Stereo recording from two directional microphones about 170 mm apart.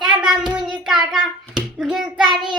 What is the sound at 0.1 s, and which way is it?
Hands, 5° right (ahead or behind).